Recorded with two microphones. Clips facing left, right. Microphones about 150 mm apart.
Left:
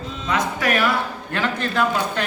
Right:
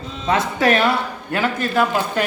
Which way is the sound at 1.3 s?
10° right (ahead or behind).